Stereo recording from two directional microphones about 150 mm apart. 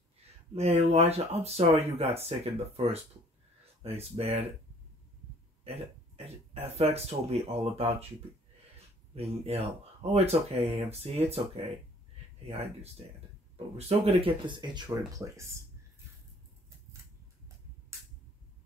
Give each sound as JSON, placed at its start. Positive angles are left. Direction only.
{"t": 0.6, "sound": "speech", "side_deg": -45}
{"t": 6.1, "sound": "speech", "side_deg": -40}